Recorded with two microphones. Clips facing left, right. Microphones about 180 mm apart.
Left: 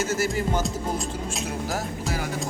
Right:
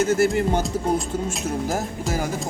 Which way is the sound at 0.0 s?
60° right (ahead or behind).